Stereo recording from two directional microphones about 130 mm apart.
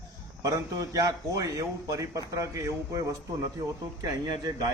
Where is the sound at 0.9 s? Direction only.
25° right (ahead or behind).